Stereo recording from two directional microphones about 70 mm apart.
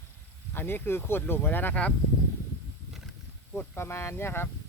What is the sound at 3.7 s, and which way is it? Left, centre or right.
Speech, left.